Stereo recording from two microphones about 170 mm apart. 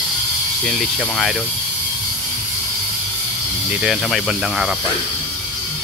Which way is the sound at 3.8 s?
Centre (ahead or behind).